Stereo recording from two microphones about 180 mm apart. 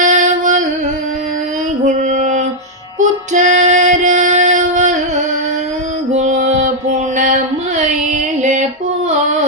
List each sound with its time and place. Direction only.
0.0 s music: 45° right (ahead or behind)
1.8 s female singing: 40° right (ahead or behind)
3.0 s music: 40° right (ahead or behind)
6.1 s music: 40° right (ahead or behind)
8.4 s music: 40° right (ahead or behind)